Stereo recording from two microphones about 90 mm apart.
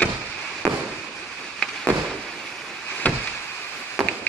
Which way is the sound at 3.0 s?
20° left (ahead or behind).